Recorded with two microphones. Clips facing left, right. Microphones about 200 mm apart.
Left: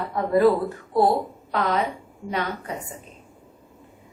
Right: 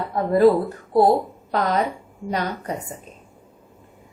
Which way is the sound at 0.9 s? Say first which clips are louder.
Right 4 dB; 40° right (ahead or behind).